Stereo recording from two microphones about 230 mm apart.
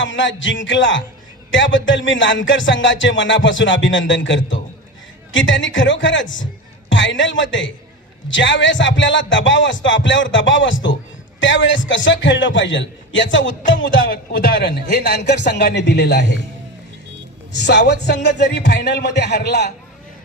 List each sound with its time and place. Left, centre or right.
0.0 s speech: left
13.7 s music: left
14.1 s a man's voice: left
17.7 s speech: left